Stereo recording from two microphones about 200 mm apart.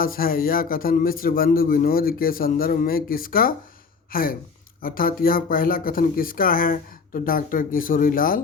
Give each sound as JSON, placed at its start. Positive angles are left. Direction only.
{"t": 0.0, "sound": "speech", "side_deg": 45}